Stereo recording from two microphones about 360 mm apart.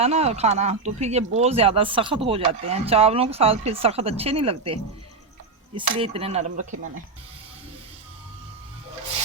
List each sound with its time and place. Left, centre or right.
0.0 s speech: centre